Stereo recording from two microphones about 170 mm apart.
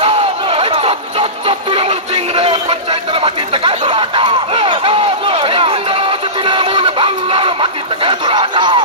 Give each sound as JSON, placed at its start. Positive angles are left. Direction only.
{"t": 0.0, "sound": "music", "side_deg": -35}